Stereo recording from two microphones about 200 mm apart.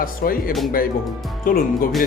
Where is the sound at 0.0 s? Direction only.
45° left (ahead or behind).